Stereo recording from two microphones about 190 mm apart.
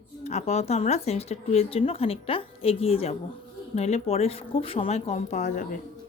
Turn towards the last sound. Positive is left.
turn(degrees=40)  # may be behind; listen again after turning